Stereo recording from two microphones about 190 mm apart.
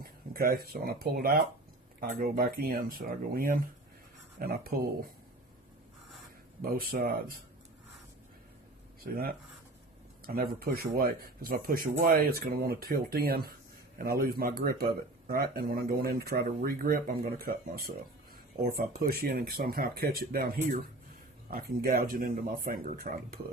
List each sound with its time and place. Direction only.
0.0 s speech: 50° right (ahead or behind)
6.6 s speech: 50° right (ahead or behind)
10.2 s speech: 50° right (ahead or behind)